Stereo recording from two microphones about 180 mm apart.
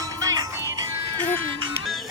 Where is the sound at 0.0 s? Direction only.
20° right (ahead or behind).